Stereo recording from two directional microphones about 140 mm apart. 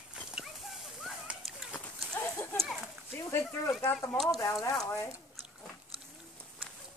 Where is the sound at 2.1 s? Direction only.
15° left (ahead or behind).